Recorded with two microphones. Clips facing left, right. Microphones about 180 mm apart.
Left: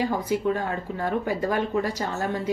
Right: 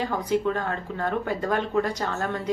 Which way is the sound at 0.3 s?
10° left (ahead or behind).